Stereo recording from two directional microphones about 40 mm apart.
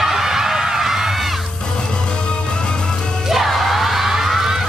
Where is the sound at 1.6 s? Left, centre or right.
Centre.